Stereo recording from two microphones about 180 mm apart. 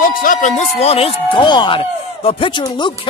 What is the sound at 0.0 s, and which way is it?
Speech, 50° left (ahead or behind).